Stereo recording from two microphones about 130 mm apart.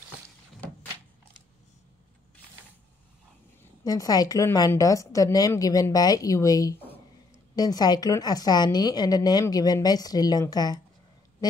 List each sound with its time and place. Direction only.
3.8 s a woman's voice: 30° left (ahead or behind)